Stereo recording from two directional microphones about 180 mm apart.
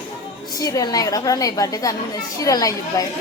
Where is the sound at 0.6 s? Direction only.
20° left (ahead or behind).